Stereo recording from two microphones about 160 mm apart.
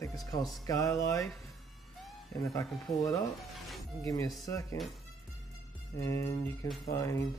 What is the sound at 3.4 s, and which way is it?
Music, centre (ahead or behind).